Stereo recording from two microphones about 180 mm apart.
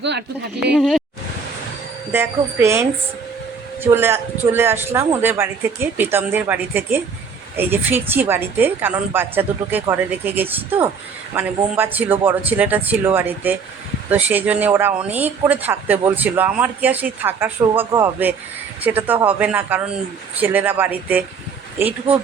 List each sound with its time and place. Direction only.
0.0 s speech: 70° right (ahead or behind)
0.7 s speech: centre (ahead or behind)
2.1 s speech: 15° right (ahead or behind)